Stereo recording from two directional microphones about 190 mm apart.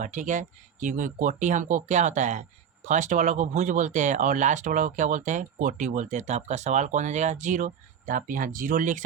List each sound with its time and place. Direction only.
0.0 s speech: 40° right (ahead or behind)